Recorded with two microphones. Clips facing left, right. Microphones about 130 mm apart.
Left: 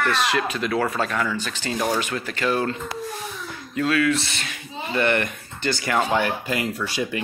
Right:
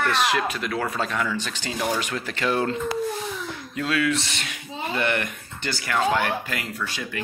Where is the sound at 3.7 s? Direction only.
15° right (ahead or behind).